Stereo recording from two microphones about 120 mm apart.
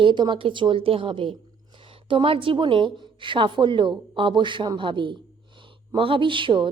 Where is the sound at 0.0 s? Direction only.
40° right (ahead or behind).